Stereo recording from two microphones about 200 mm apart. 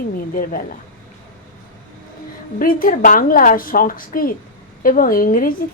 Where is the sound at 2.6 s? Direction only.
45° left (ahead or behind).